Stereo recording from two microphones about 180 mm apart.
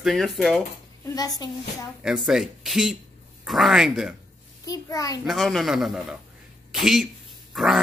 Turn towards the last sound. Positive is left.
turn(degrees=0)  # may be behind; listen again after turning